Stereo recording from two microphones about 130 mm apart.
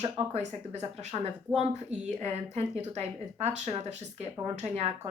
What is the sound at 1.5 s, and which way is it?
Speech, 10° right (ahead or behind).